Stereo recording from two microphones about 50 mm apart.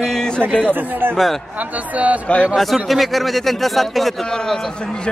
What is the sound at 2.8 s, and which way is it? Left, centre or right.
A man's voice, centre.